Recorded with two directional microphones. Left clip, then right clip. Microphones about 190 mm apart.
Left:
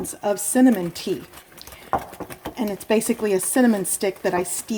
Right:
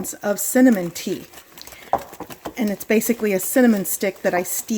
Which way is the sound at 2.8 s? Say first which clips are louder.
Right 1 dB; 25° right (ahead or behind).